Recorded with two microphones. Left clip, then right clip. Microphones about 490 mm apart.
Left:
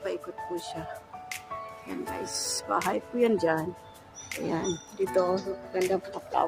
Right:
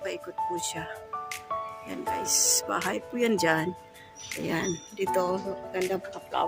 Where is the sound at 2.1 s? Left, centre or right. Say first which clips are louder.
Right 9 dB; right.